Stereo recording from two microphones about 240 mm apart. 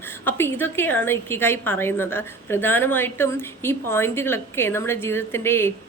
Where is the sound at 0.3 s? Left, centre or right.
Centre.